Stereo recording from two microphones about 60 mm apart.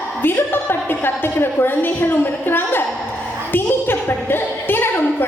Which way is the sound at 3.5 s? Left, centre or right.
Left.